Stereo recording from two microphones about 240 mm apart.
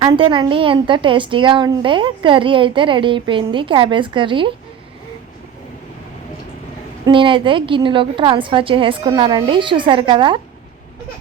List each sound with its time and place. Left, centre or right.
0.0 s a woman's voice: centre
7.0 s a woman's voice: right